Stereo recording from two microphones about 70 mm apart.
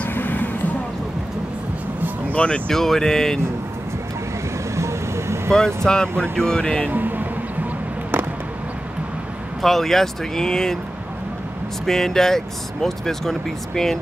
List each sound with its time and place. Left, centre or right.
0.0 s vehicle: left
2.3 s speech: centre
4.7 s vehicle: right
5.9 s speech: centre
6.9 s music: right
9.6 s speech: centre
11.8 s speech: centre